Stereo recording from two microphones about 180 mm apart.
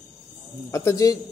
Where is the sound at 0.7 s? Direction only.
15° left (ahead or behind).